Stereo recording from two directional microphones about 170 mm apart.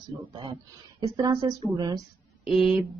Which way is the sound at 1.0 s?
25° right (ahead or behind).